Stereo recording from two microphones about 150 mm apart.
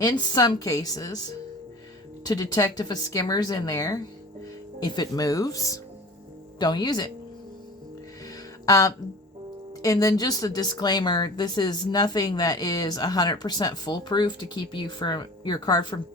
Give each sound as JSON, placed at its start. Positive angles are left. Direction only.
{"t": 0.0, "sound": "a woman's voice", "side_deg": 25}
{"t": 2.2, "sound": "a woman's voice", "side_deg": 25}
{"t": 8.6, "sound": "a woman's voice", "side_deg": 25}